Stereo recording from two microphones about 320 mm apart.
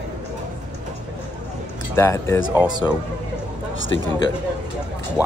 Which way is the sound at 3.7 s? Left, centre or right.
Left.